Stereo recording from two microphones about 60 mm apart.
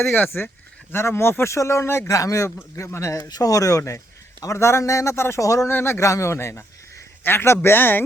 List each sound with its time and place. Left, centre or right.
0.0 s speech: left
2.0 s a man's voice: left
2.7 s a man's voice: left
5.6 s speech: left
6.1 s speech: left